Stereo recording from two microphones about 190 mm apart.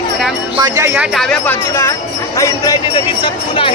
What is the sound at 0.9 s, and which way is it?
Speech, centre (ahead or behind).